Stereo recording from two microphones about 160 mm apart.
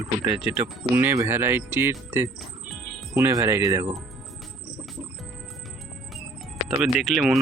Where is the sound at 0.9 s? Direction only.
10° right (ahead or behind).